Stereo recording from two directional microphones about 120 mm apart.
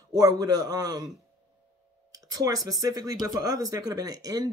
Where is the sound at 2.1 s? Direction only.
30° right (ahead or behind).